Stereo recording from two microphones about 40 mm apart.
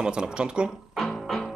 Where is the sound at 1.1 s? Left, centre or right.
Centre.